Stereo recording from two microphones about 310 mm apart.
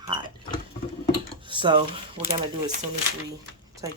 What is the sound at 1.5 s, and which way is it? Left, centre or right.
A woman's voice, centre.